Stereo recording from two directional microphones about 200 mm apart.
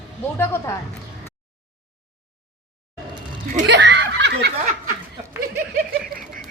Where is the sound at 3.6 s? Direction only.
60° right (ahead or behind).